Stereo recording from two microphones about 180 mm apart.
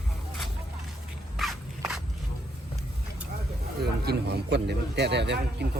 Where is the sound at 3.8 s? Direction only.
65° right (ahead or behind).